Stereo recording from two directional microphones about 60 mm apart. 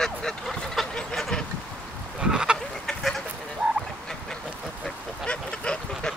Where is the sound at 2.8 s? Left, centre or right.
Centre.